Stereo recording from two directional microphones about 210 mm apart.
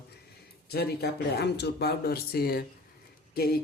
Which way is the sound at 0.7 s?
50° left (ahead or behind).